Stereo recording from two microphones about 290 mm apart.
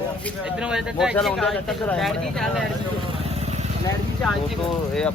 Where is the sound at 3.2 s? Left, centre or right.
Right.